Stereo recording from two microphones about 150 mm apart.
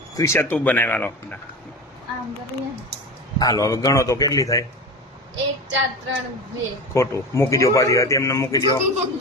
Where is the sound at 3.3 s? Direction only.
25° left (ahead or behind).